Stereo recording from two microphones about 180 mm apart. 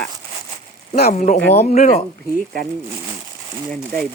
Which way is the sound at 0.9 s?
55° left (ahead or behind).